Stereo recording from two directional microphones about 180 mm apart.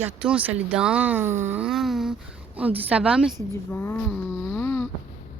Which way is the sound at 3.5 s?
10° left (ahead or behind).